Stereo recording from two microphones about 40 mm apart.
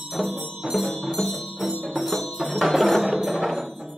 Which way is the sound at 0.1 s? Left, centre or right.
Centre.